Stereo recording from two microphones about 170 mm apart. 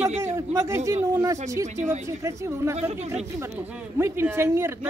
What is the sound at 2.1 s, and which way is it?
Speech, 15° right (ahead or behind).